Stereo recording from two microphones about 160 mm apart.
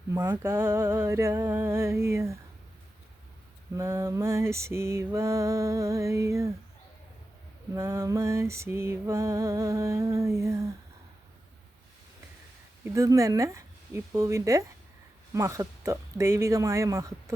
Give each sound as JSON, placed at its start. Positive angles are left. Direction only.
{"t": 0.1, "sound": "a sound", "side_deg": -15}
{"t": 3.8, "sound": "lullaby", "side_deg": -15}
{"t": 7.7, "sound": "lullaby", "side_deg": -20}
{"t": 12.8, "sound": "speech", "side_deg": -20}
{"t": 15.3, "sound": "lullaby", "side_deg": -20}